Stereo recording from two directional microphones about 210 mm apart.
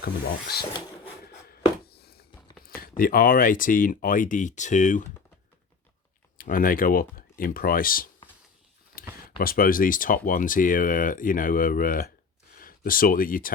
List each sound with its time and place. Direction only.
0.0 s speech: 50° left (ahead or behind)
1.2 s a sound: 50° left (ahead or behind)
3.0 s speech: 45° left (ahead or behind)
6.3 s speech: 40° left (ahead or behind)
9.0 s a sound: 45° left (ahead or behind)
9.4 s speech: 45° left (ahead or behind)